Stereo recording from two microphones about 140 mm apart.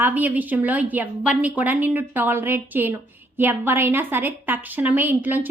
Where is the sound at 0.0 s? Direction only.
10° right (ahead or behind).